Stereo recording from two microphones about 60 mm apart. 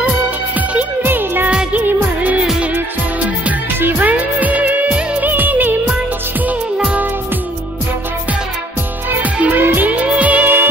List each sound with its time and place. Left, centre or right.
0.6 s music: right
1.5 s music: centre
1.8 s music: right
5.3 s music of bollywood: right
6.8 s music: centre
9.1 s music: right